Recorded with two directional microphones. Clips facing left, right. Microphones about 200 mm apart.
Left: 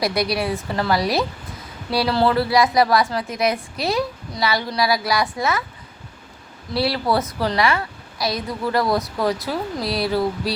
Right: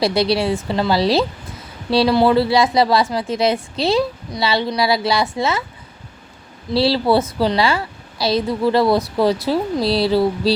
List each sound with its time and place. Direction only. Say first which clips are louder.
0.0 s a woman's voice: right 4 dB; 30° right (ahead or behind)
6.7 s a woman's voice: right 5 dB; 30° right (ahead or behind)